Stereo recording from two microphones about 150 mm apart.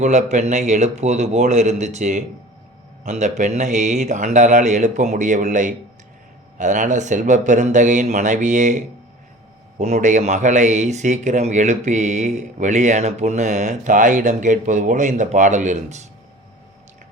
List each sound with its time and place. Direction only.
0.0 s a man's voice: 50° right (ahead or behind)